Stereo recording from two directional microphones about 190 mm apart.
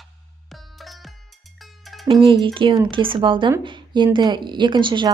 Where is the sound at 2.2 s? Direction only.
25° right (ahead or behind).